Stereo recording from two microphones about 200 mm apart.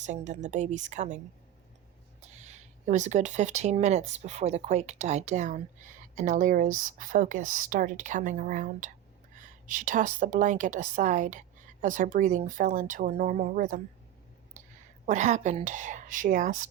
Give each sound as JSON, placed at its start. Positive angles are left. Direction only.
{"t": 0.0, "sound": "speech", "side_deg": -35}
{"t": 2.2, "sound": "speech", "side_deg": -35}
{"t": 15.0, "sound": "speech", "side_deg": -35}